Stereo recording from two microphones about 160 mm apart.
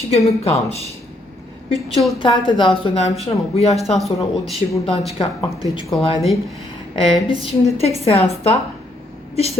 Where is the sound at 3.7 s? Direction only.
Centre (ahead or behind).